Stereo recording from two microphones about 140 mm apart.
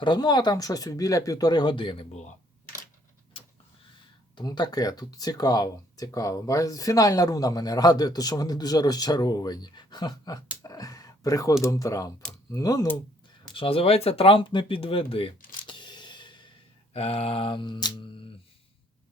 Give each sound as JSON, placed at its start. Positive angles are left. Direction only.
{"t": 0.0, "sound": "speech", "side_deg": 30}
{"t": 4.4, "sound": "speech", "side_deg": 30}
{"t": 10.6, "sound": "a sound", "side_deg": 25}
{"t": 11.6, "sound": "speech", "side_deg": 25}
{"t": 13.5, "sound": "speech", "side_deg": 40}
{"t": 15.6, "sound": "a sound", "side_deg": 35}
{"t": 16.9, "sound": "speech", "side_deg": 45}